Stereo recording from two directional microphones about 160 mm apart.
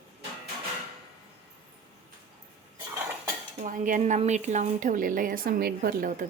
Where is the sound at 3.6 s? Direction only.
55° right (ahead or behind).